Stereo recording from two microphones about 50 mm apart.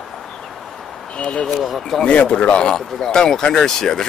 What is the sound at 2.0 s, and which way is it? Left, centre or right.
Speech, left.